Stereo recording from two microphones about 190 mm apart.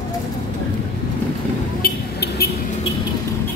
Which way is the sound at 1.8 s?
55° left (ahead or behind).